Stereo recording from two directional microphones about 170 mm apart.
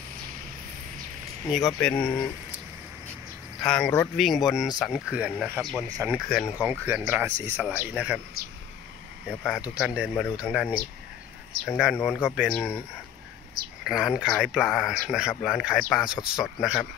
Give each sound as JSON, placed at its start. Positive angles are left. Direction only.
{"t": 1.5, "sound": "speech", "side_deg": 0}
{"t": 3.6, "sound": "speech", "side_deg": 5}
{"t": 5.9, "sound": "speech", "side_deg": -20}
{"t": 6.1, "sound": "speech", "side_deg": 0}
{"t": 6.6, "sound": "speech", "side_deg": -10}
{"t": 9.3, "sound": "speech", "side_deg": 0}
{"t": 13.8, "sound": "speech", "side_deg": 0}